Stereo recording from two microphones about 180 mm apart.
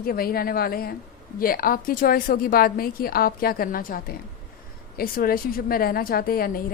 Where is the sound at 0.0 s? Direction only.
55° left (ahead or behind).